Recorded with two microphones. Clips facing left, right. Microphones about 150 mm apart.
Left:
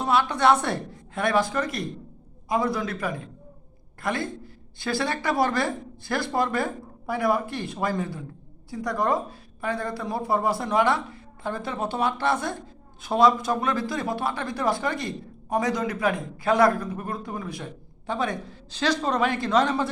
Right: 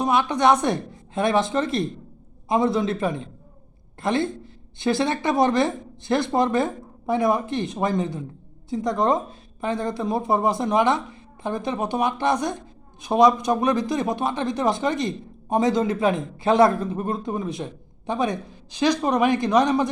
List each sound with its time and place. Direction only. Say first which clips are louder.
0.0 s speech: right 2 dB; 15° right (ahead or behind)